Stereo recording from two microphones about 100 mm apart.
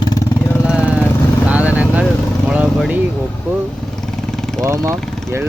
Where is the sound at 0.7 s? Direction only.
10° right (ahead or behind).